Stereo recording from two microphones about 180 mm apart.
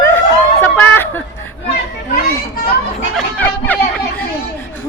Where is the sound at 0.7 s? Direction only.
10° left (ahead or behind).